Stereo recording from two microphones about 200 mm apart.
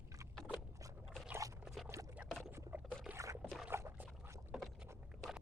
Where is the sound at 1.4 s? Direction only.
15° right (ahead or behind).